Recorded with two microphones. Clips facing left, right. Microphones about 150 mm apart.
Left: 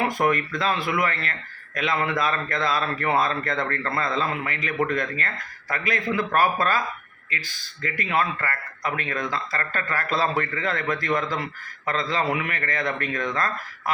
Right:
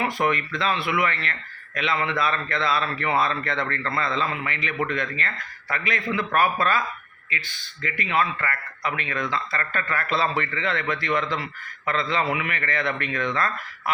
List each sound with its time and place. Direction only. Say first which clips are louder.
0.2 s a man's voice: left 1 dB; 45° left (ahead or behind)